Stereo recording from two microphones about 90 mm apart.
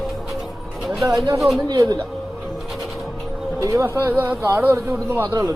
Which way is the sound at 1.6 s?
45° right (ahead or behind).